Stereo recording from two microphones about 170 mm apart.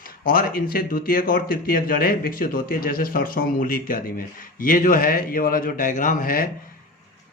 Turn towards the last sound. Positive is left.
turn(degrees=55)  # may be behind; listen again after turning